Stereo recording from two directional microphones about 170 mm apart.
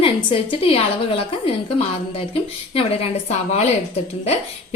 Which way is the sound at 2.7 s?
35° left (ahead or behind).